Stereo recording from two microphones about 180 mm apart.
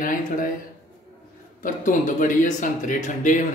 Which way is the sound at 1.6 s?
45° left (ahead or behind).